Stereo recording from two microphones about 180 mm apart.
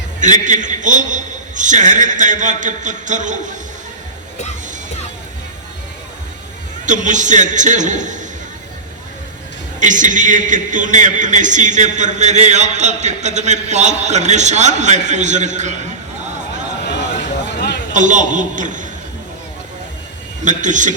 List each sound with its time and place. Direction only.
0.2 s a man's voice: 45° right (ahead or behind)
6.8 s a man's voice: 45° right (ahead or behind)
9.8 s a man's voice: 45° right (ahead or behind)
17.9 s a man's voice: 45° right (ahead or behind)
20.4 s a man's voice: 45° right (ahead or behind)